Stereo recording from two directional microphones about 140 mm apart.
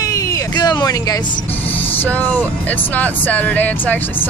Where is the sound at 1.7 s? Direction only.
15° left (ahead or behind).